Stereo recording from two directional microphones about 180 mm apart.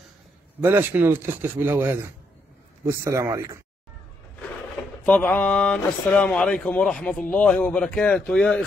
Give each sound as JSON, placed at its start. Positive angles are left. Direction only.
{"t": 0.6, "sound": "speech", "side_deg": -10}
{"t": 5.0, "sound": "speech", "side_deg": 10}